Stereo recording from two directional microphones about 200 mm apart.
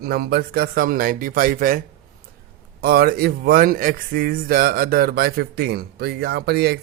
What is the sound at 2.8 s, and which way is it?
A man's voice, 50° right (ahead or behind).